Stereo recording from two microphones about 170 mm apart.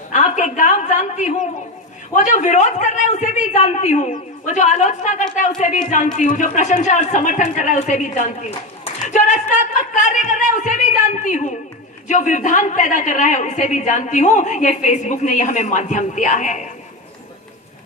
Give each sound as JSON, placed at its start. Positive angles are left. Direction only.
{"t": 0.1, "sound": "a woman's voice", "side_deg": 45}